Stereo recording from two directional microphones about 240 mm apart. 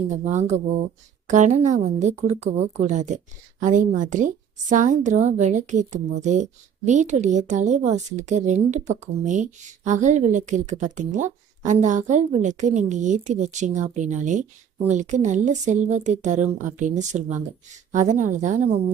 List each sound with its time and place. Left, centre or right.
0.1 s a woman's voice: right